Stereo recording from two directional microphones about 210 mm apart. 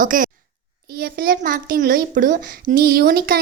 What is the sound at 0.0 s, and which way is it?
A woman's voice, 40° right (ahead or behind).